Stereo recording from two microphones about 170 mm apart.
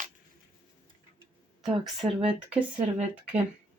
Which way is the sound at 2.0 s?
30° right (ahead or behind).